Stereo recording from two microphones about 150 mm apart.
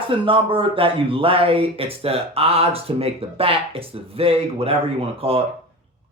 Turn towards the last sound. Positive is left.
turn(degrees=-40)  # may be behind; listen again after turning